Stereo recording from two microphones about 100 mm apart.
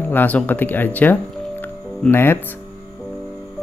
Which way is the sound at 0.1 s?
20° left (ahead or behind).